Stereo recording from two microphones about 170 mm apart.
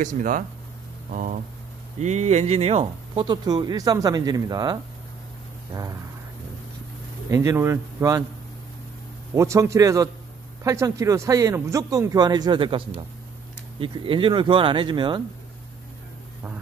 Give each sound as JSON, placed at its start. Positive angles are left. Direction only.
{"t": 0.0, "sound": "speech", "side_deg": -50}
{"t": 7.2, "sound": "speech", "side_deg": -20}
{"t": 9.3, "sound": "speech", "side_deg": -15}